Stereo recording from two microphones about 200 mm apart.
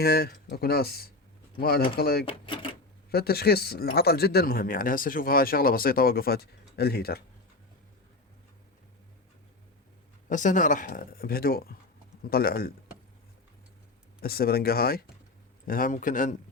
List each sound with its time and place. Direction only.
0.0 s speech: 50° left (ahead or behind)
2.2 s speech: 25° left (ahead or behind)
3.1 s speech: 50° left (ahead or behind)
10.2 s speech: 40° left (ahead or behind)
14.2 s speech: 50° left (ahead or behind)